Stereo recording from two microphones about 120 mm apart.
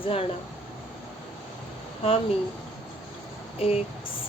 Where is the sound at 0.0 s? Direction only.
50° left (ahead or behind).